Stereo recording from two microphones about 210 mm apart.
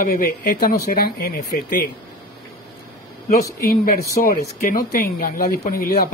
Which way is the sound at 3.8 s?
45° left (ahead or behind).